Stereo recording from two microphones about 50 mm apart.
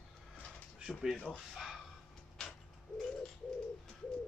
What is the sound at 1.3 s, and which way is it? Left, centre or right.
Speech, centre.